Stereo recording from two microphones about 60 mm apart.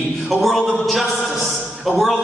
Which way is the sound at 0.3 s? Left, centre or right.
Centre.